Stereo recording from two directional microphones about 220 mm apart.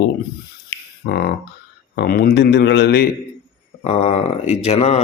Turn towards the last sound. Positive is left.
turn(degrees=30)  # may be behind; listen again after turning